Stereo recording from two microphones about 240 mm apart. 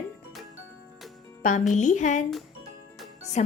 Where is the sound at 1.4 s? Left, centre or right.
Left.